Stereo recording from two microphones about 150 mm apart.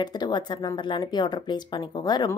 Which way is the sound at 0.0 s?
30° left (ahead or behind).